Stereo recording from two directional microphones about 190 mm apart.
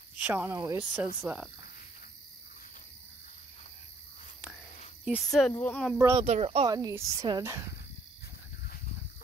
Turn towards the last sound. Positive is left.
turn(degrees=-15)  # may be behind; listen again after turning